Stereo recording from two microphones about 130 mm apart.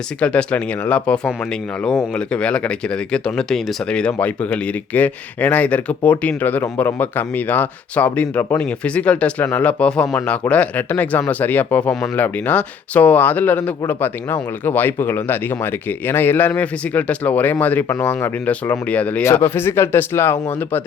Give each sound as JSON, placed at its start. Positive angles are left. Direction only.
{"t": 0.2, "sound": "speech", "side_deg": 10}